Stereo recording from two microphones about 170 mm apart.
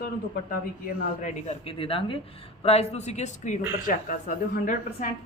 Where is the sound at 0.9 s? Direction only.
40° left (ahead or behind).